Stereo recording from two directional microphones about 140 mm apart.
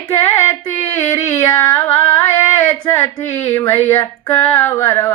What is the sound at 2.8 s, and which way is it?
A woman's voice, 15° left (ahead or behind).